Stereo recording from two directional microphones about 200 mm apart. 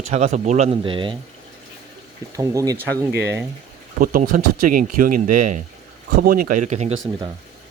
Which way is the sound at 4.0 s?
45° right (ahead or behind).